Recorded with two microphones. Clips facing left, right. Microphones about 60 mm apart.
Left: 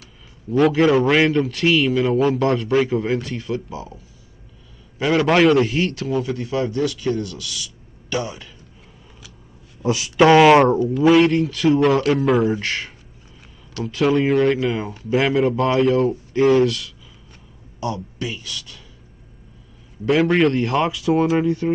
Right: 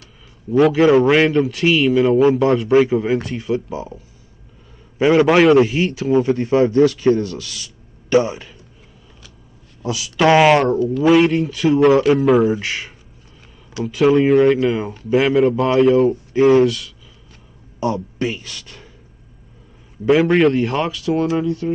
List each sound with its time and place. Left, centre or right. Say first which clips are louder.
0.5 s a man's voice: right 3 dB; centre
3.3 s speech: right 4 dB; centre
5.1 s a man's voice: right 3 dB; centre
6.0 s speech: right 7 dB; right
9.8 s speech: left 3 dB; left
10.5 s speech: left 2 dB; centre
11.1 s a man's voice: right 1 dB; centre
17.7 s speech: right 5 dB; right
20.1 s a man's voice: right 3 dB; centre
20.9 s speech: left 1 dB; centre